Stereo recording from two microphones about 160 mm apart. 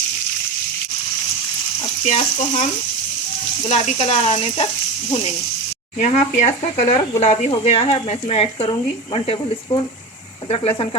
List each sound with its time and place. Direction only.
2.0 s speech: 40° left (ahead or behind)
3.7 s speech: 45° left (ahead or behind)
6.0 s speech: 45° left (ahead or behind)